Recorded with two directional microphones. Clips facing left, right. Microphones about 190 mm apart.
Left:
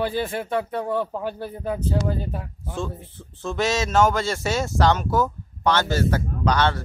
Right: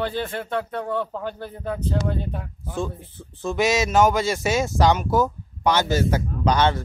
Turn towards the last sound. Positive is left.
turn(degrees=-20)  # may be behind; listen again after turning